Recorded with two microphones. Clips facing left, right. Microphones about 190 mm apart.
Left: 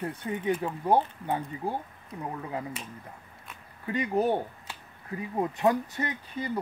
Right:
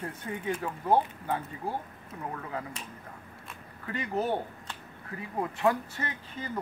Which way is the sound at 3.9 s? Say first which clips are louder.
Left 4 dB; 15° left (ahead or behind).